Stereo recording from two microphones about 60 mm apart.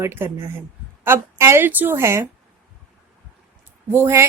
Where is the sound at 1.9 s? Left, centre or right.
Right.